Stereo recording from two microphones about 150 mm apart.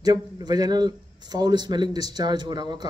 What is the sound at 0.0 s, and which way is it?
A man's voice, 25° right (ahead or behind).